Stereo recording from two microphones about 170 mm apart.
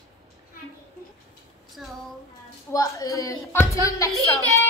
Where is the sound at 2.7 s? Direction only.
20° left (ahead or behind).